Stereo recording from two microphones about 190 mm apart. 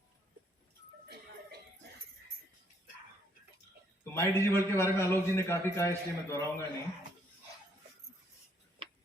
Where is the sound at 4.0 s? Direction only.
15° left (ahead or behind).